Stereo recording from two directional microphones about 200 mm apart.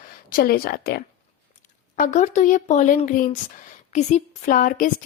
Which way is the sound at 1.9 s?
35° left (ahead or behind).